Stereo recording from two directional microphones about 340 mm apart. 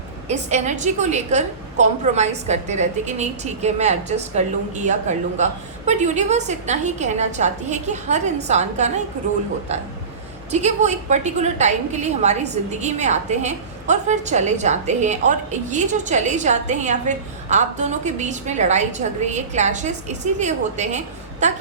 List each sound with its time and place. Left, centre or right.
0.3 s a woman's voice: centre
10.5 s a woman's voice: centre